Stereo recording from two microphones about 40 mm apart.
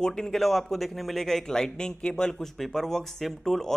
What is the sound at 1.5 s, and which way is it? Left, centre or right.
Speech, centre.